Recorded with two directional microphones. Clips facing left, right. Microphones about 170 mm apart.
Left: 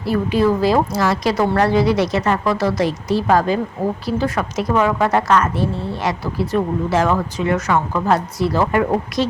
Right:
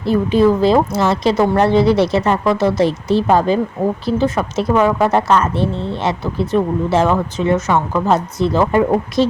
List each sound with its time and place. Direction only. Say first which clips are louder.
0.0 s speech: right 4 dB; 20° right (ahead or behind)